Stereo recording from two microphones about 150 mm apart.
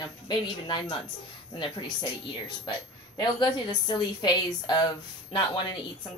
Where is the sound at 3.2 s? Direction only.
30° left (ahead or behind).